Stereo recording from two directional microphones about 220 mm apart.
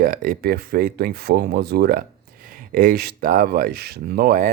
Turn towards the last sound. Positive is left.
turn(degrees=-40)  # may be behind; listen again after turning